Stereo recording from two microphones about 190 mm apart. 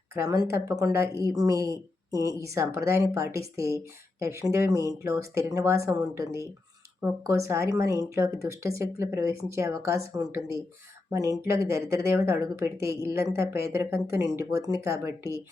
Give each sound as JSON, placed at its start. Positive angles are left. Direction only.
{"t": 0.1, "sound": "speech", "side_deg": -15}